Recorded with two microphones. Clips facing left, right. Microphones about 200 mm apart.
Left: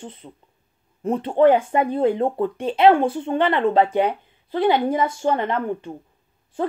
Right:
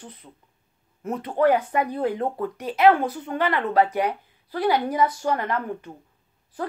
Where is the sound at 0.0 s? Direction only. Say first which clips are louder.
Left 6 dB; 25° left (ahead or behind).